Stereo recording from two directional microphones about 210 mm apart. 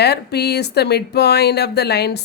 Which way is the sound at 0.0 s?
50° left (ahead or behind).